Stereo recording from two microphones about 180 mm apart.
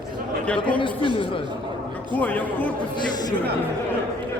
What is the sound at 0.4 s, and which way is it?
Speech, 5° left (ahead or behind).